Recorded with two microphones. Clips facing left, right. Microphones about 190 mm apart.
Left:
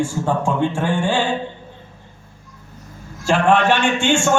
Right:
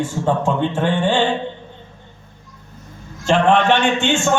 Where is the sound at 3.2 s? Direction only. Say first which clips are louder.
Right 1 dB; 10° left (ahead or behind).